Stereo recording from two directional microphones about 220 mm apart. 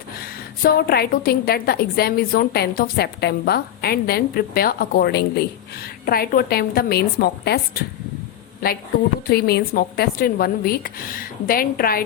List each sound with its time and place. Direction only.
0.6 s a woman's voice: 45° left (ahead or behind)
8.6 s a woman's voice: 40° left (ahead or behind)